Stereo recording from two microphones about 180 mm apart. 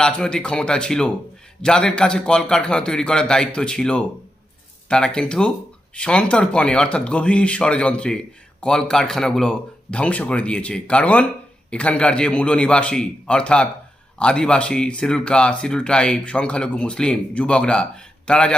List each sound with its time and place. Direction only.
0.0 s speech: 5° left (ahead or behind)